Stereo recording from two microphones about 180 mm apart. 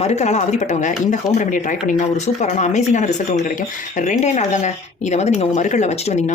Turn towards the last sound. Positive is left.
turn(degrees=35)  # may be behind; listen again after turning